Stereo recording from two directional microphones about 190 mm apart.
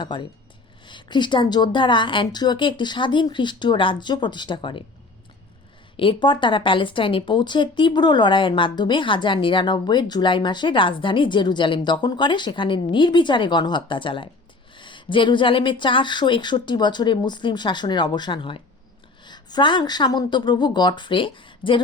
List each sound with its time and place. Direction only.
0.0 s a woman's voice: 25° left (ahead or behind)
6.0 s a woman's voice: 25° left (ahead or behind)